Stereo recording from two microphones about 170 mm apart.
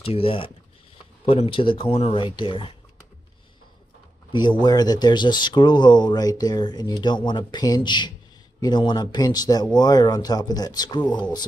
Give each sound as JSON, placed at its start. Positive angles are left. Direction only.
{"t": 0.0, "sound": "speech", "side_deg": 35}
{"t": 4.3, "sound": "speech", "side_deg": 25}